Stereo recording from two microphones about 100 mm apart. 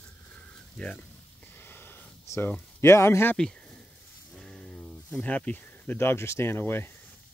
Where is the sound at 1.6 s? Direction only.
20° left (ahead or behind).